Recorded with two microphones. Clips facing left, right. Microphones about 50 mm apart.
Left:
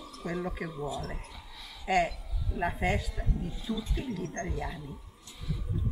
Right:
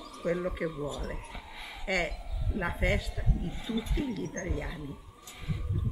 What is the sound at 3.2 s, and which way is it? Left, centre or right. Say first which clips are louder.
Speech: even; right.